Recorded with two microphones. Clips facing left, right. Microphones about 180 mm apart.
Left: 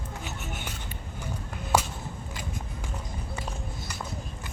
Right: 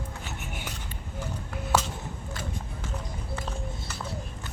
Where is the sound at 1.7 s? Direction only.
15° left (ahead or behind).